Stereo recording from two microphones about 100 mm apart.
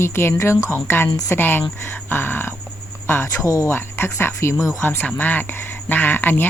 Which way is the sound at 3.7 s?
25° left (ahead or behind).